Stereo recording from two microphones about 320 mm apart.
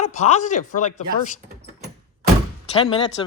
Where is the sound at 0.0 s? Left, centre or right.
Left.